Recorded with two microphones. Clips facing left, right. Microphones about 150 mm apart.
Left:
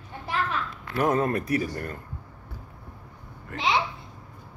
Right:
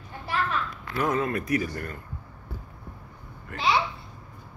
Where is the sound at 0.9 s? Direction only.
45° left (ahead or behind).